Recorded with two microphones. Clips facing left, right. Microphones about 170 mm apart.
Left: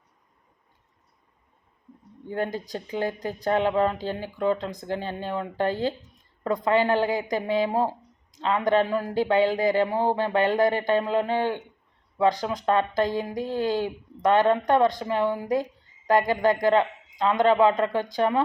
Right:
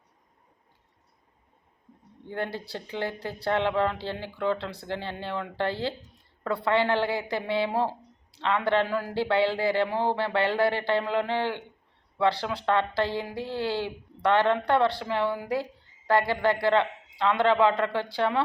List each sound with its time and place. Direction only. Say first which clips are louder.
2.3 s a man's voice: left 4 dB; 15° left (ahead or behind)